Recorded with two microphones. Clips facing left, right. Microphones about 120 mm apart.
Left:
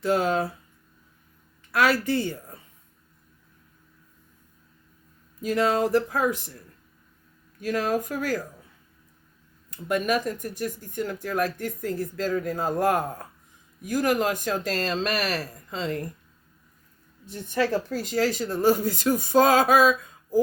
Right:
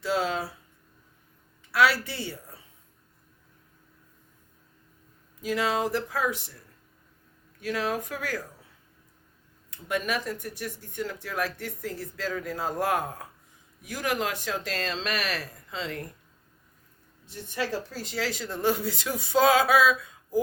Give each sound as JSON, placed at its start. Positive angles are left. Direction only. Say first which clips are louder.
{"t": 0.0, "sound": "speech", "louder": "left 5 dB", "side_deg": 50}
{"t": 1.7, "sound": "speech", "louder": "left 2 dB", "side_deg": 50}
{"t": 5.4, "sound": "speech", "louder": "left 4 dB", "side_deg": 45}
{"t": 7.6, "sound": "speech", "louder": "left 4 dB", "side_deg": 45}
{"t": 9.6, "sound": "speech", "louder": "left 5 dB", "side_deg": 45}
{"t": 17.2, "sound": "speech", "louder": "left 6 dB", "side_deg": 50}